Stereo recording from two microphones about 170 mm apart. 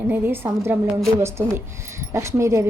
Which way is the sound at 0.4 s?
15° right (ahead or behind).